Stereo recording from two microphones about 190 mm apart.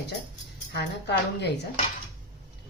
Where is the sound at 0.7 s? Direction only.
60° left (ahead or behind).